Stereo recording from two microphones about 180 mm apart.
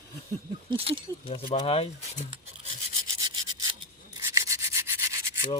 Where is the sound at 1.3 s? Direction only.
35° left (ahead or behind).